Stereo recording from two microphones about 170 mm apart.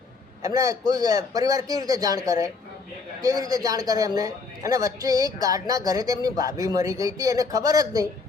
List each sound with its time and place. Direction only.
0.4 s a man's voice: 20° right (ahead or behind)